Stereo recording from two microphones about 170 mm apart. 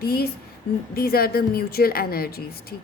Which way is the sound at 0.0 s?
65° left (ahead or behind).